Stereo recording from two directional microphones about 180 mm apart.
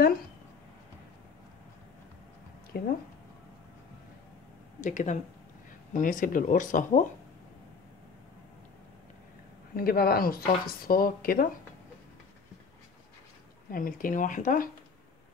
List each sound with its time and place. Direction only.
2.7 s speech: 55° left (ahead or behind)
4.7 s speech: 45° left (ahead or behind)
9.8 s speech: 55° left (ahead or behind)
13.7 s speech: 50° left (ahead or behind)